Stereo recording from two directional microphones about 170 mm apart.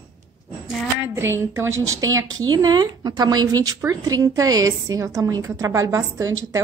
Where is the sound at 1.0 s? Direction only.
15° right (ahead or behind).